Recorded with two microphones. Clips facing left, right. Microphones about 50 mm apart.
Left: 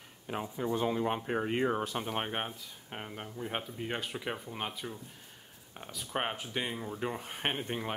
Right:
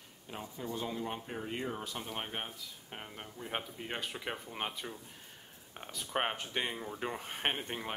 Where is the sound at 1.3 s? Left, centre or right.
Left.